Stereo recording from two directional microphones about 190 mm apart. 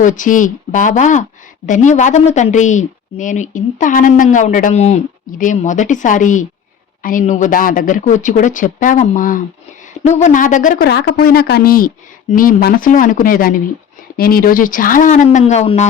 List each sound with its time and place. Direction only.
0.0 s a woman's voice: 45° left (ahead or behind)